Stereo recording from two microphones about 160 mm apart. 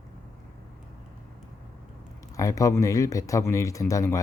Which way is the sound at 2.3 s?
20° left (ahead or behind).